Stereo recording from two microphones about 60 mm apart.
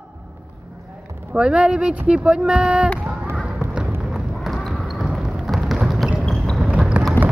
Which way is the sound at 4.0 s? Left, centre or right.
Centre.